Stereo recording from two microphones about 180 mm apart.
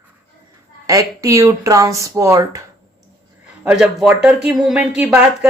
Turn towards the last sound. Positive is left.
turn(degrees=-5)  # may be behind; listen again after turning